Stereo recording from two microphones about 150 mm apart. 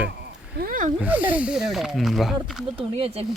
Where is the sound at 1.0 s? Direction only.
10° right (ahead or behind).